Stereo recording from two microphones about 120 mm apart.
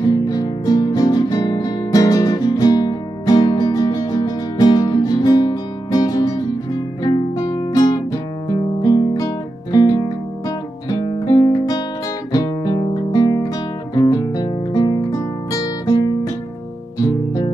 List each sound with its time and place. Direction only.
0.0 s music: 35° left (ahead or behind)
10.9 s guitar: 35° left (ahead or behind)
13.9 s music: 35° left (ahead or behind)